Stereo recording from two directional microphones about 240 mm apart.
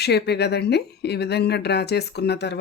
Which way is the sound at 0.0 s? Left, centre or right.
Left.